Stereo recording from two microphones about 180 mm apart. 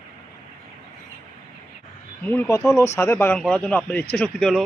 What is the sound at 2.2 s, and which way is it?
Speech, 10° left (ahead or behind).